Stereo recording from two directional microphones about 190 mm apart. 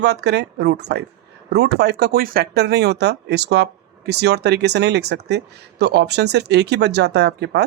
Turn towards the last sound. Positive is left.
turn(degrees=-60)  # may be behind; listen again after turning